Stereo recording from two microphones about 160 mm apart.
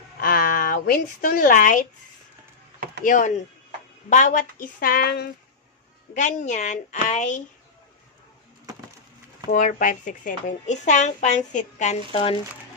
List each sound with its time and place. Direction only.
0.2 s a sound: 60° left (ahead or behind)
3.0 s a woman's voice: 55° left (ahead or behind); by 5.3 s 85° left
6.1 s speech: 50° left (ahead or behind)
9.5 s speech: 55° left (ahead or behind)
12.1 s speech: 35° left (ahead or behind)